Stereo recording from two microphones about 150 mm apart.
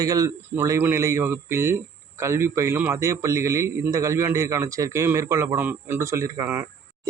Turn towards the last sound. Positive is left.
turn(degrees=-15)  # may be behind; listen again after turning